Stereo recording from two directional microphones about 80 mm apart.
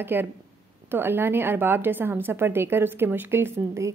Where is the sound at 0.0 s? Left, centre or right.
Right.